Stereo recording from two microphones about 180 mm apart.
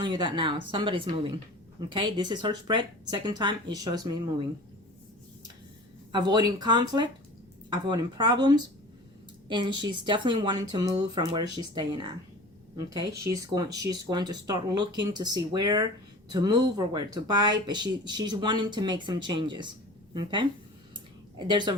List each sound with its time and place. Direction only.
0.0 s speech: 25° right (ahead or behind)
6.1 s speech: 25° right (ahead or behind)
20.9 s a sound: 25° right (ahead or behind)